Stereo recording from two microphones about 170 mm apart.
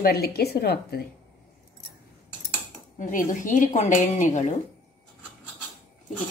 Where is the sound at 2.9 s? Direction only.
50° left (ahead or behind).